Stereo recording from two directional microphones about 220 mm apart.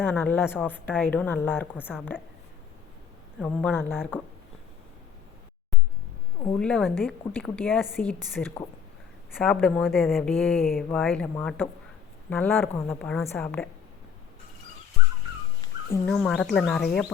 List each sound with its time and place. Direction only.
0.0 s a woman's voice: 10° left (ahead or behind)
3.4 s a woman's voice: 5° left (ahead or behind)
3.9 s speech: 5° right (ahead or behind)
6.6 s a woman's voice: 5° left (ahead or behind)
15.6 s a sound: 15° left (ahead or behind)
16.0 s speech: 5° left (ahead or behind)